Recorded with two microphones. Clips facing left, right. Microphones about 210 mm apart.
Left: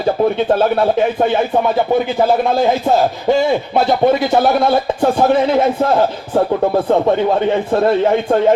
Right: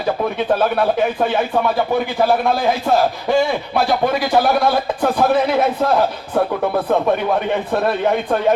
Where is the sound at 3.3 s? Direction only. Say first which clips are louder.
Left 5 dB; 20° left (ahead or behind).